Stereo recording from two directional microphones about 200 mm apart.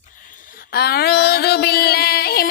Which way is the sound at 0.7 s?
50° left (ahead or behind).